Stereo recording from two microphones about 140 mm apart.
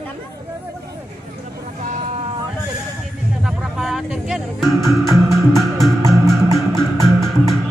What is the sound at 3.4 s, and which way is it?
Music, 5° right (ahead or behind).